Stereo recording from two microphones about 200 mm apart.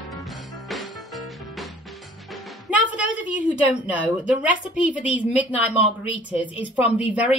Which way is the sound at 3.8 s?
5° right (ahead or behind).